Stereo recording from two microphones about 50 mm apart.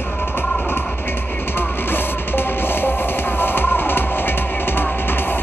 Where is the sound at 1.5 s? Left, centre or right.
Left.